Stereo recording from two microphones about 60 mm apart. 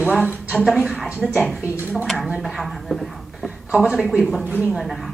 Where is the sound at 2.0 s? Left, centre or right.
Centre.